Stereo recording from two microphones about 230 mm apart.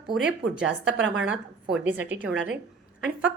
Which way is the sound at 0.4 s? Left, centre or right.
Right.